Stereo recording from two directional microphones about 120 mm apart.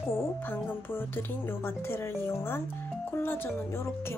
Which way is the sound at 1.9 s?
20° left (ahead or behind).